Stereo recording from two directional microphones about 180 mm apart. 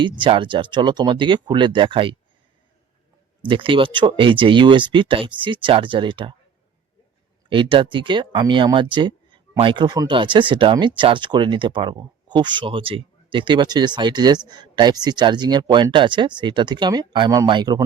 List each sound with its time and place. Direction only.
0.0 s speech: 30° right (ahead or behind)
3.4 s speech: 30° right (ahead or behind)
7.5 s speech: 25° right (ahead or behind)